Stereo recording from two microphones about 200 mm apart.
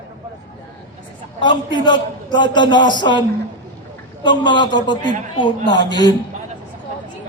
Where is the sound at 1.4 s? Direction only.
25° left (ahead or behind).